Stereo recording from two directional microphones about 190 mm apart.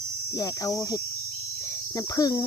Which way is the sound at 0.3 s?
20° left (ahead or behind).